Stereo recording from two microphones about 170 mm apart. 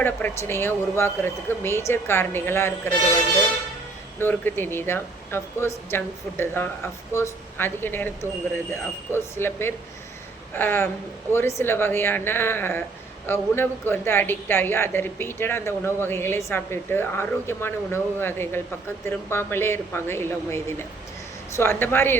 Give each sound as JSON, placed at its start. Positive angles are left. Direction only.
{"t": 0.0, "sound": "speech", "side_deg": 10}
{"t": 4.2, "sound": "speech", "side_deg": 10}